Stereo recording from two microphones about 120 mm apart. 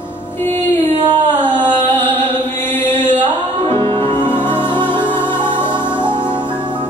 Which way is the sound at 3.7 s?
50° right (ahead or behind).